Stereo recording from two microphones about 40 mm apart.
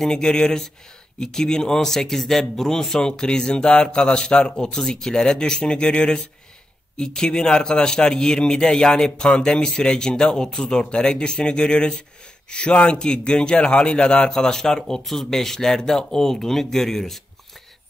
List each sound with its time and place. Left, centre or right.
0.0 s a man's voice: centre